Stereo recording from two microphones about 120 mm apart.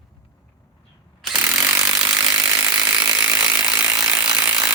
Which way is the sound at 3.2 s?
30° right (ahead or behind).